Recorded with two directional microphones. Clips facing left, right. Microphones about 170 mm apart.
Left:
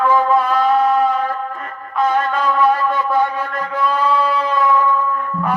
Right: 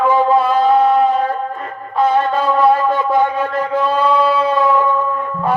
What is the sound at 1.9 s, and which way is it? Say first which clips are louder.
Music: right 3 dB; 35° right (ahead or behind).